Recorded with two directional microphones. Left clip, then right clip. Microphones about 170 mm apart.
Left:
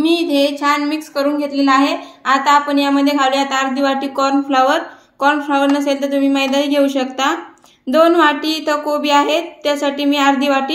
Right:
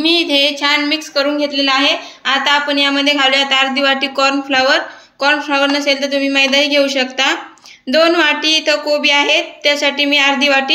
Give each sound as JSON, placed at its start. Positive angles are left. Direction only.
{"t": 0.0, "sound": "speech", "side_deg": 50}